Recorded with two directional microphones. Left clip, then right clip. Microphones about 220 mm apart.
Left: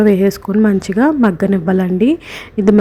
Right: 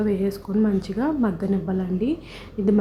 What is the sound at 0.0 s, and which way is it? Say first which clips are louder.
A woman's voice: left 12 dB; 35° left (ahead or behind).